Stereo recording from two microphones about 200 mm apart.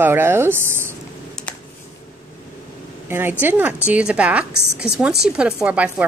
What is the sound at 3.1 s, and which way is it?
A woman's voice, 10° right (ahead or behind).